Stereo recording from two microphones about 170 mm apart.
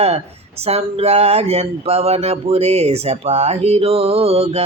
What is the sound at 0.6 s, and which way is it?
Speech, 35° right (ahead or behind).